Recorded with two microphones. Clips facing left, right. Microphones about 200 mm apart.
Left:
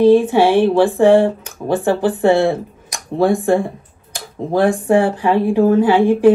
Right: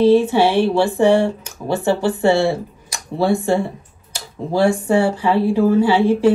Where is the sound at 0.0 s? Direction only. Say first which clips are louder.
Left 2 dB; 15° left (ahead or behind).